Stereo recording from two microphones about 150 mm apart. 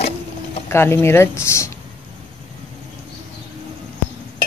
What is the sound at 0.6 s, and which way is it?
Speech, 15° left (ahead or behind).